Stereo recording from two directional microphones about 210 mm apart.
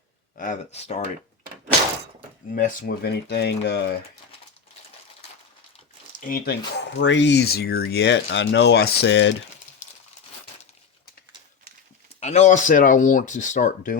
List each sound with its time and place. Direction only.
0.3 s speech: 35° left (ahead or behind)
2.5 s speech: 40° left (ahead or behind)
6.1 s speech: 45° left (ahead or behind)
6.7 s speech: 60° left (ahead or behind)
12.2 s speech: 35° left (ahead or behind)